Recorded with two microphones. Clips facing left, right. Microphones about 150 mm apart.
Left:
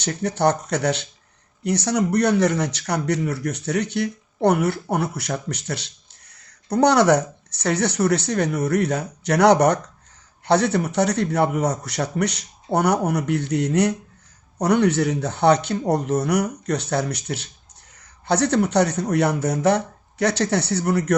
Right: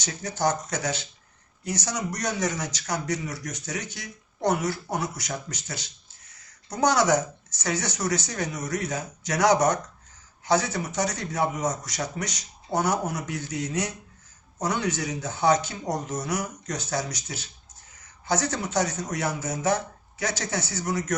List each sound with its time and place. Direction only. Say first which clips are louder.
0.0 s speech: left 6 dB; 65° left (ahead or behind)